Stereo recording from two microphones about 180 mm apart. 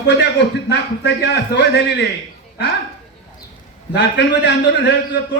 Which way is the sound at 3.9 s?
70° left (ahead or behind).